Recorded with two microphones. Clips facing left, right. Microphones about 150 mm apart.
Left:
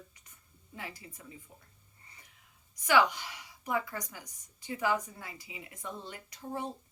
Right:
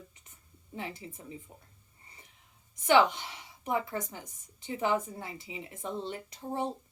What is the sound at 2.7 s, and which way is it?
A woman's voice, 25° right (ahead or behind).